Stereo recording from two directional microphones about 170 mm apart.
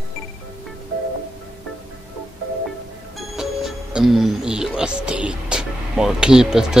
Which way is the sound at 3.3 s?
5° right (ahead or behind).